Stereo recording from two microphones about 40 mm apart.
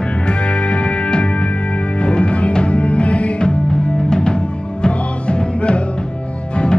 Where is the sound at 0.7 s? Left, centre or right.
Left.